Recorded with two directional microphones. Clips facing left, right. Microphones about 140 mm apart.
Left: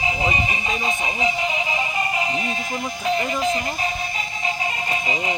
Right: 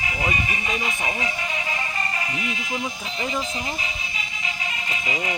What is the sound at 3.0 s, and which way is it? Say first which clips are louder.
Speech: left 7 dB; 60° left (ahead or behind).